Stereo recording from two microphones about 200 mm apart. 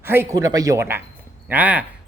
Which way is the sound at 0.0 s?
10° right (ahead or behind).